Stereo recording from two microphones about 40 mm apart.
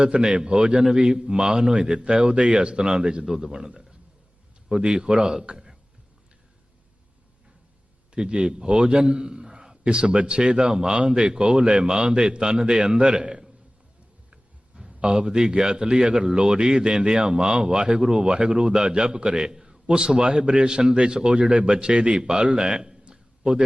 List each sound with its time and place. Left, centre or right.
0.0 s a man's voice: right
2.1 s a man's voice: right; by 3.7 s centre
4.7 s a man's voice: right
8.1 s a man's voice: right
14.8 s a man's voice: right
22.5 s a sound: centre